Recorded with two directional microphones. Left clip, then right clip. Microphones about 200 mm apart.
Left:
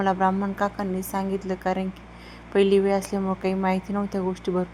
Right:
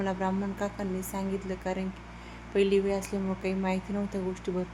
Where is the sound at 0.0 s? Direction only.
20° left (ahead or behind).